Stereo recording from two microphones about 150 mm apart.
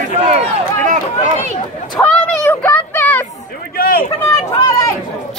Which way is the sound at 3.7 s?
85° left.